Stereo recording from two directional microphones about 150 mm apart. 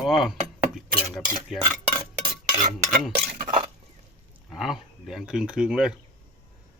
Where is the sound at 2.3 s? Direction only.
60° right (ahead or behind).